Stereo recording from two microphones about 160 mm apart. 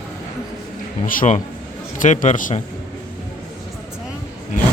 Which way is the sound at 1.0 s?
55° left (ahead or behind).